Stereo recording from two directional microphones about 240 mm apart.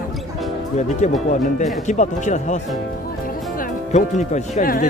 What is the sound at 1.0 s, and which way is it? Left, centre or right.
Speech, left.